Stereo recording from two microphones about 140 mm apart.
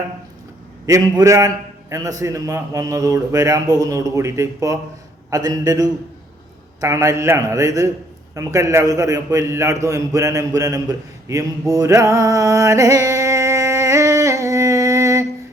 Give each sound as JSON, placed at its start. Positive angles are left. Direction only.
{"t": 0.9, "sound": "a man's voice", "side_deg": -20}
{"t": 11.7, "sound": "music", "side_deg": -25}